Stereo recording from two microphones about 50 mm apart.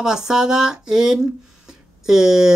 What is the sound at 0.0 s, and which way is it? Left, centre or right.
Speech, centre.